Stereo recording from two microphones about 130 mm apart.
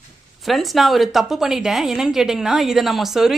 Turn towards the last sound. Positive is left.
turn(degrees=0)  # may be behind; listen again after turning